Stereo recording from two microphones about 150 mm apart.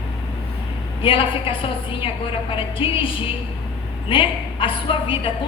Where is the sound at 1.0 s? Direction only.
35° left (ahead or behind).